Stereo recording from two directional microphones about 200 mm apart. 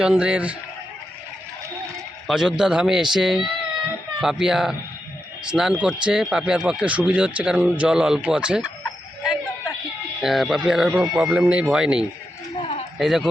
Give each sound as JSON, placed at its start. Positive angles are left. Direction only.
{"t": 0.0, "sound": "speech", "side_deg": -5}
{"t": 2.2, "sound": "speech", "side_deg": 0}
{"t": 12.5, "sound": "a sound", "side_deg": 30}
{"t": 13.0, "sound": "speech", "side_deg": 0}